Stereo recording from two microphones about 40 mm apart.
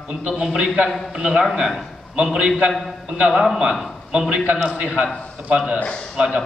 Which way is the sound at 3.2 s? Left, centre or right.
Centre.